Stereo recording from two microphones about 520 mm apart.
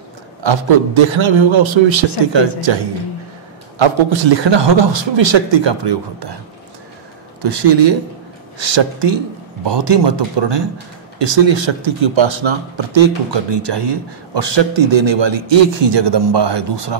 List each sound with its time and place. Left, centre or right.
0.4 s a man's voice: right
7.4 s a man's voice: right